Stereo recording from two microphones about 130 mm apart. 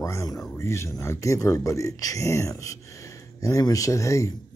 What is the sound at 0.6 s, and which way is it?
Speech, 20° left (ahead or behind).